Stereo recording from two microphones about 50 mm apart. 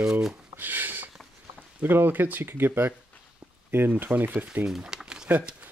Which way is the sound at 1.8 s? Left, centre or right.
Right.